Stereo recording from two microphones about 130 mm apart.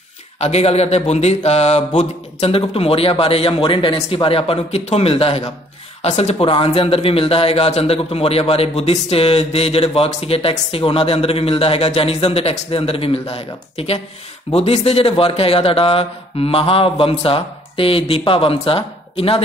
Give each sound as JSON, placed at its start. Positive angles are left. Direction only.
{"t": 0.4, "sound": "speech", "side_deg": 55}